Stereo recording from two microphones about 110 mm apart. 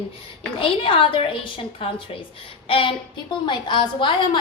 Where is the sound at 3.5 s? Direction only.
45° left (ahead or behind).